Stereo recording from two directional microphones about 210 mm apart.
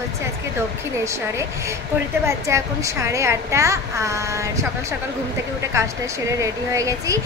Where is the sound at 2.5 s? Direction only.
15° right (ahead or behind).